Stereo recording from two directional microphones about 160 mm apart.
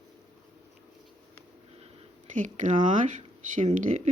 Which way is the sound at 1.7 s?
40° right (ahead or behind).